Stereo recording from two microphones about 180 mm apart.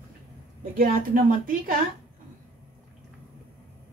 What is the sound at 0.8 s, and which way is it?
Speech, 50° right (ahead or behind).